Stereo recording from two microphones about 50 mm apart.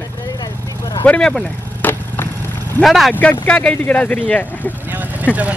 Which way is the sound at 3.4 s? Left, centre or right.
Left.